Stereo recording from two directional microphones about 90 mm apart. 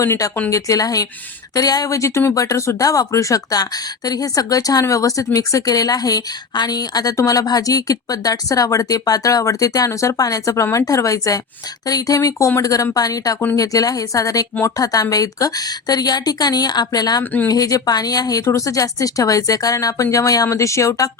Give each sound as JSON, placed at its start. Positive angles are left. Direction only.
{"t": 0.0, "sound": "a woman's voice", "side_deg": 35}